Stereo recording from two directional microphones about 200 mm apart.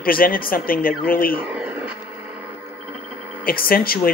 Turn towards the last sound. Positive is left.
turn(degrees=45)  # may be behind; listen again after turning